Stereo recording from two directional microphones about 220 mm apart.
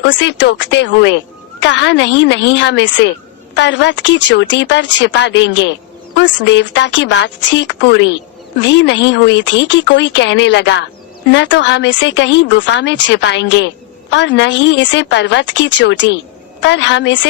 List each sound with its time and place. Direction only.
0.0 s a woman's voice: 55° left (ahead or behind)